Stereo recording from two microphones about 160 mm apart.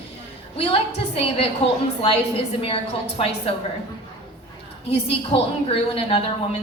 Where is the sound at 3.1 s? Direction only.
35° left (ahead or behind).